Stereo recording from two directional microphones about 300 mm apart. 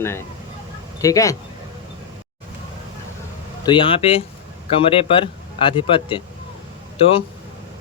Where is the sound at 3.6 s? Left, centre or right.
Centre.